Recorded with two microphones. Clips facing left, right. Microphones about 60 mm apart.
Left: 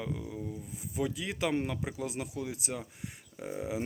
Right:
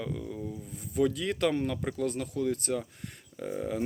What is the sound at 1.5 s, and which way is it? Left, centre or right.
Speech, centre.